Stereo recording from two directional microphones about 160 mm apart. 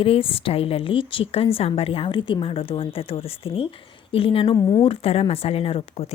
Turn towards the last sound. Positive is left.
turn(degrees=40)  # may be behind; listen again after turning